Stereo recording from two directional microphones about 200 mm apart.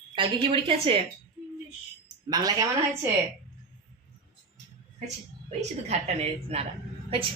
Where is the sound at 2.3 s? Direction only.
15° right (ahead or behind).